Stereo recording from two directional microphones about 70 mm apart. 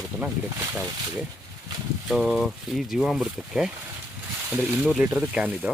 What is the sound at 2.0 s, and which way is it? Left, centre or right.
Speech, centre.